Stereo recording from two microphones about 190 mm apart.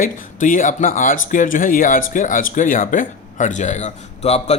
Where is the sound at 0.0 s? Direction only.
45° left (ahead or behind).